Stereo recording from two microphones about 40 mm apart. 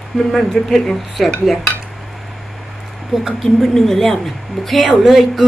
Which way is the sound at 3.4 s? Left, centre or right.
Centre.